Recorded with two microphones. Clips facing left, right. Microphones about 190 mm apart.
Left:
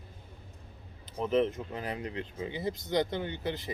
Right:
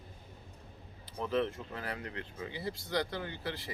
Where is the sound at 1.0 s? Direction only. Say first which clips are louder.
Left 5 dB; 20° left (ahead or behind).